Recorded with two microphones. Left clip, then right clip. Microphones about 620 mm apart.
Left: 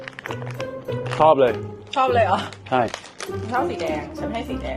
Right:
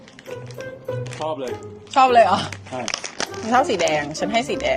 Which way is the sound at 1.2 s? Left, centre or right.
Left.